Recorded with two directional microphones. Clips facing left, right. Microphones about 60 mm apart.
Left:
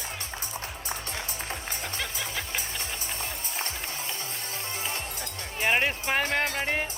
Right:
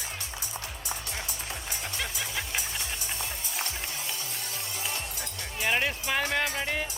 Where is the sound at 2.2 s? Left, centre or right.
Right.